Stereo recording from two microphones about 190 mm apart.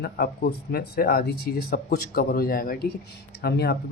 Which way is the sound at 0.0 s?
55° left (ahead or behind).